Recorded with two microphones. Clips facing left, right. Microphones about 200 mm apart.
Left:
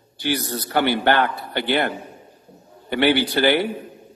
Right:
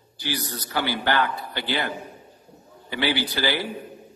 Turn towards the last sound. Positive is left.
turn(degrees=60)  # may be behind; listen again after turning